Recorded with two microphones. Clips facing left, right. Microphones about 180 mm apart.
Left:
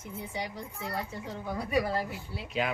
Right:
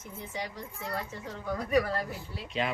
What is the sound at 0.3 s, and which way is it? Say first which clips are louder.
A man's voice: right 1 dB; 10° left (ahead or behind).